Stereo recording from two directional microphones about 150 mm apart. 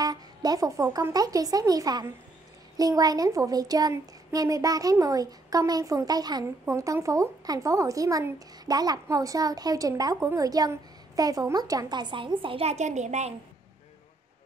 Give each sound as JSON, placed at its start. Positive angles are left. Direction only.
{"t": 0.0, "sound": "a woman's voice", "side_deg": -25}